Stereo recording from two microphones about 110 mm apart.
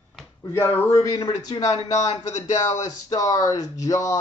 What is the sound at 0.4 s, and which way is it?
Speech, 25° left (ahead or behind).